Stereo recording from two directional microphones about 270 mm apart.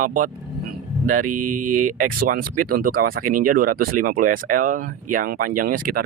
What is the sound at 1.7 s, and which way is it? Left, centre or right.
Speech, right.